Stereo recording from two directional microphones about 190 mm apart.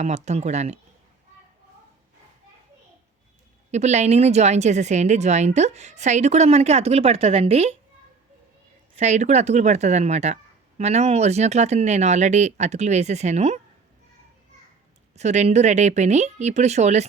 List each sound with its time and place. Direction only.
0.0 s speech: 35° right (ahead or behind)
3.7 s speech: 35° right (ahead or behind)
9.0 s speech: 35° right (ahead or behind)
15.1 s speech: 35° right (ahead or behind)